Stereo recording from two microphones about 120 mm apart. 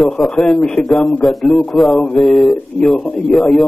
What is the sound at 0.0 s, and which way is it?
A man's voice, centre (ahead or behind).